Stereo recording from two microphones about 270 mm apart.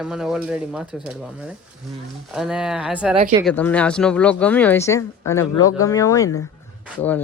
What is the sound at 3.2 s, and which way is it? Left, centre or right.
Speech, right.